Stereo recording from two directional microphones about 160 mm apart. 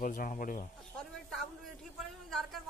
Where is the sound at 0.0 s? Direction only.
55° left (ahead or behind).